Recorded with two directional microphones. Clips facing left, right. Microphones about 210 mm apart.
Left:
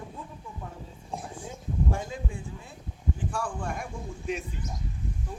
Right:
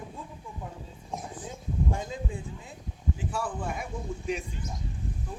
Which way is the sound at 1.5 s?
20° right (ahead or behind).